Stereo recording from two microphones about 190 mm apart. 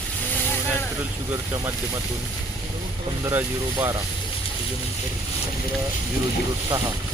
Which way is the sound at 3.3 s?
10° right (ahead or behind).